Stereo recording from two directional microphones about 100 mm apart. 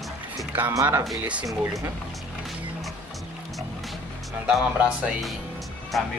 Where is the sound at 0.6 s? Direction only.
20° right (ahead or behind).